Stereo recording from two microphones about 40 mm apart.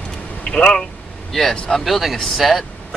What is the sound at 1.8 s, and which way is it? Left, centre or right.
Speech, centre.